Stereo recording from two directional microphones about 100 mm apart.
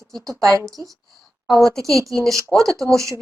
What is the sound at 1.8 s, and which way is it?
Speech, 30° right (ahead or behind).